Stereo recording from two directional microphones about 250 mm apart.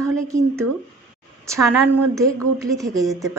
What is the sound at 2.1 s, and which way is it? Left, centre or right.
A woman's voice, centre.